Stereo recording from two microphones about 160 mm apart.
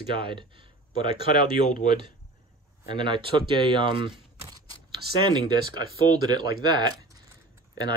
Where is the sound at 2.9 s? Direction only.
30° right (ahead or behind).